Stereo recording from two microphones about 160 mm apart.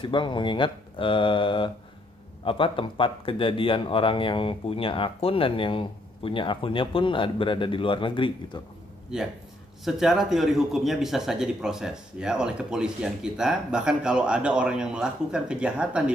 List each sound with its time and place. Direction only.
0.0 s speech: 30° left (ahead or behind)
9.1 s a man's voice: 5° right (ahead or behind)